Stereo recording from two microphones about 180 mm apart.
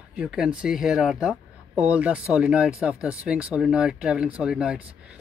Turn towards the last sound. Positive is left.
turn(degrees=-5)  # may be behind; listen again after turning